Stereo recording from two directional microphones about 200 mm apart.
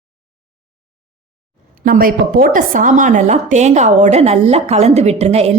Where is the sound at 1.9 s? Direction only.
45° right (ahead or behind).